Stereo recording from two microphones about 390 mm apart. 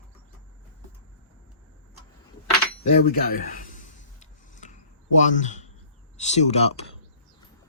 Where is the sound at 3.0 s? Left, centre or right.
Left.